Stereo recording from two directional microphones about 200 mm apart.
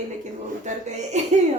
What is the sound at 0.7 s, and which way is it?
Speech, 35° right (ahead or behind).